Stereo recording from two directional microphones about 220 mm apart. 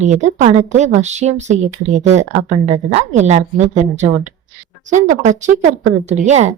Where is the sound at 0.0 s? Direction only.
30° right (ahead or behind).